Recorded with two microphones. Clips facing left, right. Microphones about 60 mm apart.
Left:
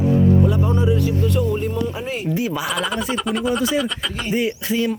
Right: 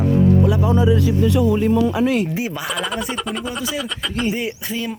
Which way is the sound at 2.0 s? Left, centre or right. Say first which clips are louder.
Right 9 dB; right.